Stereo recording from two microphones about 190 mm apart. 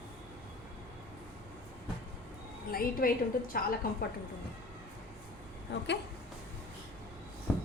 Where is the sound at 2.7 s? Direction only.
50° left (ahead or behind).